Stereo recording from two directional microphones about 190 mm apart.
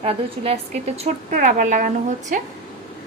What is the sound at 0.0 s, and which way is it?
A woman's voice, 30° right (ahead or behind).